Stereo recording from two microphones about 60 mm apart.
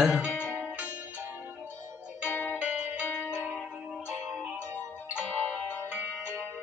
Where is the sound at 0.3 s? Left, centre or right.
Left.